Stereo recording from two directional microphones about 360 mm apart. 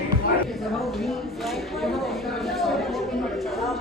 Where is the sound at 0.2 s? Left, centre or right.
Left.